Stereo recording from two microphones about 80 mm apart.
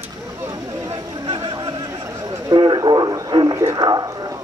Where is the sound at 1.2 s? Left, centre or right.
Right.